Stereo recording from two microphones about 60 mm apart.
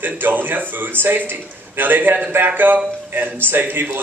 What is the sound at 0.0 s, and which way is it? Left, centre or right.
A man's voice, right.